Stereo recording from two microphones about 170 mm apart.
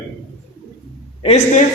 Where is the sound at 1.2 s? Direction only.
40° left (ahead or behind).